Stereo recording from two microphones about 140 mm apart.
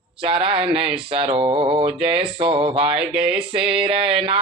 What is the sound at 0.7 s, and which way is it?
Speech, 45° right (ahead or behind).